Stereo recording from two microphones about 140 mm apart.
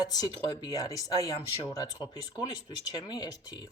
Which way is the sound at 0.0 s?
25° left (ahead or behind).